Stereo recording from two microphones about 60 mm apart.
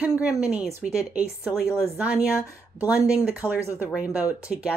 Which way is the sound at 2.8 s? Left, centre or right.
Right.